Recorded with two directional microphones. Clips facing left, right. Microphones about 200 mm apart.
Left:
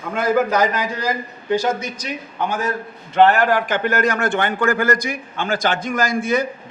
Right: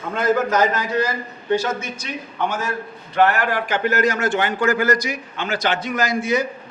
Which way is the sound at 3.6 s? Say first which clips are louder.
Even; 55° left (ahead or behind).